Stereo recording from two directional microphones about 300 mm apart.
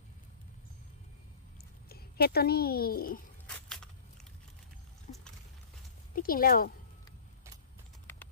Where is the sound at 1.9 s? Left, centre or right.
Left.